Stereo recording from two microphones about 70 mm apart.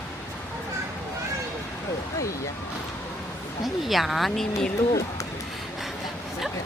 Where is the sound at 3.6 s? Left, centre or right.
Centre.